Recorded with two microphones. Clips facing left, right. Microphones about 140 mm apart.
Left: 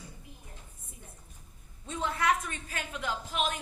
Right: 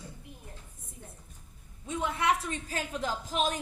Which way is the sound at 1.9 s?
15° right (ahead or behind).